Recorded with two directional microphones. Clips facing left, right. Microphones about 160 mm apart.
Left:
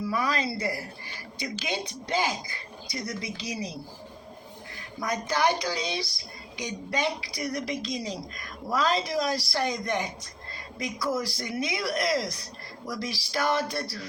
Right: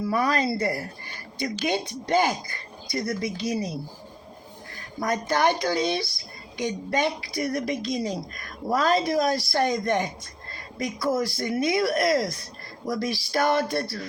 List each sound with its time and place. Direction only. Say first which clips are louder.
0.1 s a woman's voice: right 6 dB; 50° right (ahead or behind)
5.0 s a woman's voice: right 3 dB; 50° right (ahead or behind)